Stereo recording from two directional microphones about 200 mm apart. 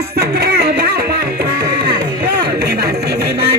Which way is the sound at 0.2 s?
50° right (ahead or behind).